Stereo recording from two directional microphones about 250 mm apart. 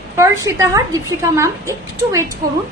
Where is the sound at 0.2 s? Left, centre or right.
Centre.